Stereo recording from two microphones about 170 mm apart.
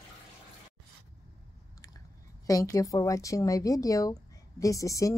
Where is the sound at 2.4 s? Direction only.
20° left (ahead or behind).